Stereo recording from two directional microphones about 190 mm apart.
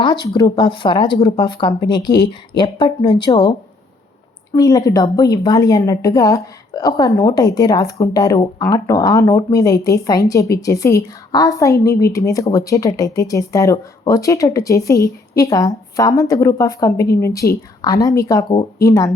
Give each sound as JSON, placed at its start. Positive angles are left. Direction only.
{"t": 0.3, "sound": "speech", "side_deg": 20}
{"t": 4.5, "sound": "a woman's voice", "side_deg": 20}